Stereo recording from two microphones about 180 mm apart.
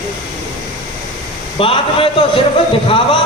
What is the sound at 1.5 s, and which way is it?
A man's voice, 30° left (ahead or behind).